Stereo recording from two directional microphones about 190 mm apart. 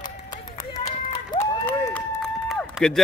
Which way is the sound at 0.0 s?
40° left (ahead or behind).